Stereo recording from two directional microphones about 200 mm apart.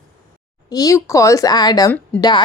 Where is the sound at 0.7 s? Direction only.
15° left (ahead or behind).